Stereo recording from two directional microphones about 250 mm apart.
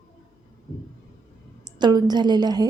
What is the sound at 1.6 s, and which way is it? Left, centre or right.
A woman's voice, centre.